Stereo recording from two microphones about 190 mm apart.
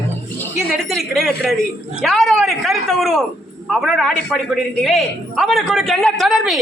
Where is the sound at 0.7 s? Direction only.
Centre (ahead or behind).